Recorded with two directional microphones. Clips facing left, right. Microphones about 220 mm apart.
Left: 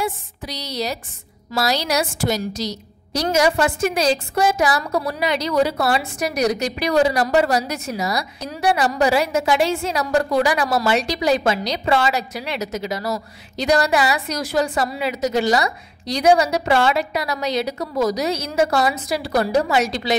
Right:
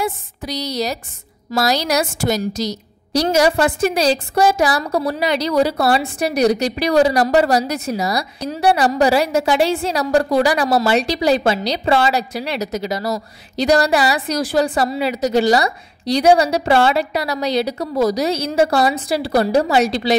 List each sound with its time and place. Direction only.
0.0 s a woman's voice: 40° right (ahead or behind)